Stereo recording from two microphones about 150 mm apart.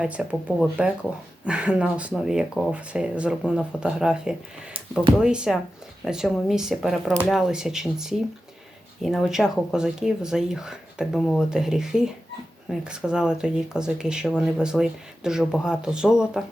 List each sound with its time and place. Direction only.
0.0 s speech: 10° right (ahead or behind)